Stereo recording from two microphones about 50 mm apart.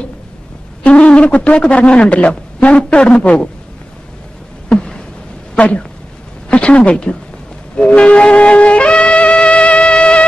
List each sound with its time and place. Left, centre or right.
0.8 s speech: left
4.6 s a sound: centre
5.6 s speech: centre
7.7 s music: left